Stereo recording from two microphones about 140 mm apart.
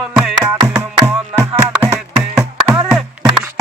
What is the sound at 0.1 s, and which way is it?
Music, 5° right (ahead or behind).